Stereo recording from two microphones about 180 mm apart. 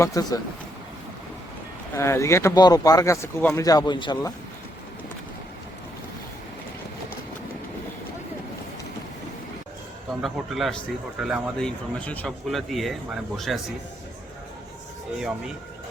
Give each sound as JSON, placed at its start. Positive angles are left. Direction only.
{"t": 0.0, "sound": "speech", "side_deg": 20}
{"t": 2.0, "sound": "speech", "side_deg": 15}
{"t": 10.2, "sound": "speech", "side_deg": 0}